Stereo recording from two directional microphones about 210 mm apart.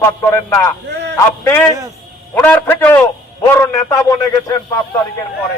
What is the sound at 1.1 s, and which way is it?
Speech, 10° left (ahead or behind).